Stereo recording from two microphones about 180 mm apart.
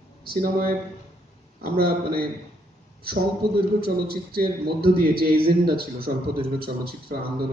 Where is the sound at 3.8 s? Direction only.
55° right (ahead or behind).